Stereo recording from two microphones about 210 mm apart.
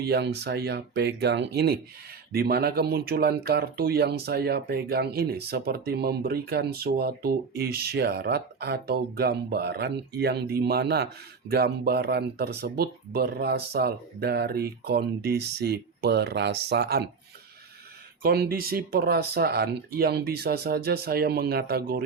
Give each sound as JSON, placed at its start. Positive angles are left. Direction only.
{"t": 0.0, "sound": "speech", "side_deg": -50}
{"t": 18.2, "sound": "speech", "side_deg": -45}